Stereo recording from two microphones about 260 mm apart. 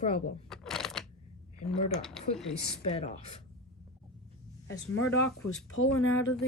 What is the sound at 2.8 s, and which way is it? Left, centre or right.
Speech, left.